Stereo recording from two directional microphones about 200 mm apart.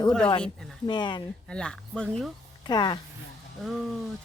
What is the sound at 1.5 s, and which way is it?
Speech, 5° left (ahead or behind).